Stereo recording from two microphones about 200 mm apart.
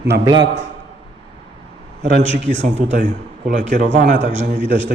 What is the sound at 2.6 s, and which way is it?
Speech, 35° right (ahead or behind).